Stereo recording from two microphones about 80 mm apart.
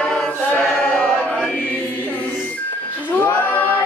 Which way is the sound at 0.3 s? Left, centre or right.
Left.